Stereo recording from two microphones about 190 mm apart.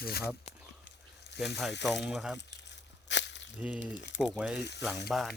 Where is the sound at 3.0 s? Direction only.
70° left (ahead or behind).